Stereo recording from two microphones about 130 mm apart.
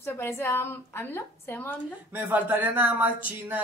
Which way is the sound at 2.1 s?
15° right (ahead or behind).